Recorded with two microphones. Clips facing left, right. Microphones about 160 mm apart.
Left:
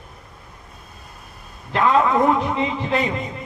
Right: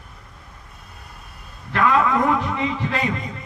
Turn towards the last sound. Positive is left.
turn(degrees=25)  # may be behind; listen again after turning